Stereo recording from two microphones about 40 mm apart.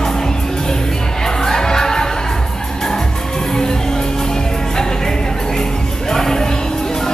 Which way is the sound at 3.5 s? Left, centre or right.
Centre.